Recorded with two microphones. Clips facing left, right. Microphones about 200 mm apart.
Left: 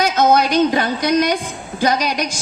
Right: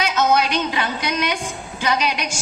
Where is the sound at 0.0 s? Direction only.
35° left (ahead or behind).